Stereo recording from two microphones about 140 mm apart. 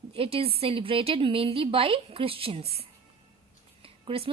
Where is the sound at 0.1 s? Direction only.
45° right (ahead or behind).